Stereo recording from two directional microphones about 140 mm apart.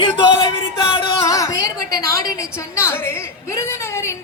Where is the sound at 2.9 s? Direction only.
15° left (ahead or behind).